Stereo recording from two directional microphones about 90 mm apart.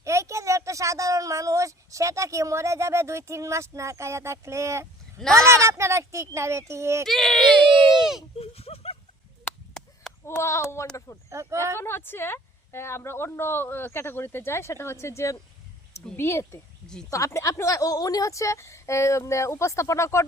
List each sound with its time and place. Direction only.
0.0 s speech: 35° right (ahead or behind)
7.0 s speech: 5° left (ahead or behind)
8.4 s speech: 90° left
9.7 s a sound: 5° left (ahead or behind)
10.2 s speech: 30° left (ahead or behind)
11.3 s speech: 30° right (ahead or behind)
11.8 s speech: 25° left (ahead or behind)
16.8 s speech: 10° left (ahead or behind)
17.1 s a woman's voice: 35° left (ahead or behind)